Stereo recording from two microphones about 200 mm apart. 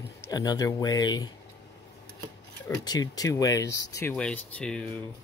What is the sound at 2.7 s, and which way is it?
Speech, 20° left (ahead or behind).